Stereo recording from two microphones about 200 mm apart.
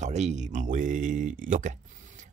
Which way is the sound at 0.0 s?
35° right (ahead or behind).